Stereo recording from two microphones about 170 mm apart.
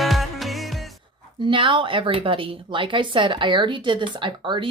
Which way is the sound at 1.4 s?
30° right (ahead or behind).